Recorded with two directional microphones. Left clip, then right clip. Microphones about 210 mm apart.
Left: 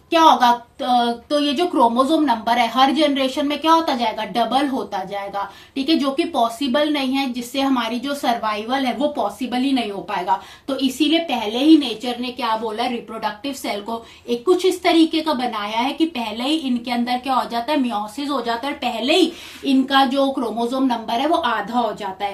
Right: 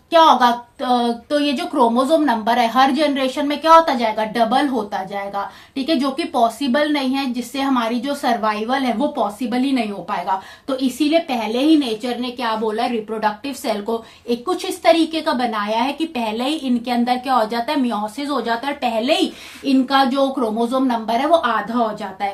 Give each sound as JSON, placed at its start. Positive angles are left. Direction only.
{"t": 0.1, "sound": "a woman's voice", "side_deg": -30}
{"t": 14.3, "sound": "a woman's voice", "side_deg": -30}